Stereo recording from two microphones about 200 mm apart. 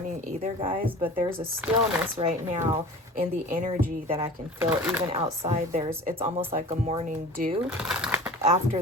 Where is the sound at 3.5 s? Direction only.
35° right (ahead or behind).